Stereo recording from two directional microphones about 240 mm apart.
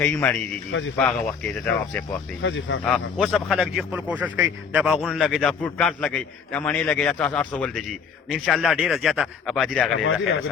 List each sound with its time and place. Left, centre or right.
0.0 s a man's voice: centre
2.4 s speech: left
2.8 s a man's voice: centre